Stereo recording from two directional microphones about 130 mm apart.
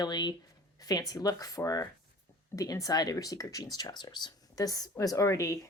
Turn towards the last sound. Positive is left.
turn(degrees=25)  # may be behind; listen again after turning